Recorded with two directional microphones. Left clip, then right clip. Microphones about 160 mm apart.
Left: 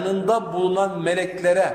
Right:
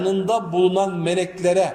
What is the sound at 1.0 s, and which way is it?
Speech, 20° right (ahead or behind).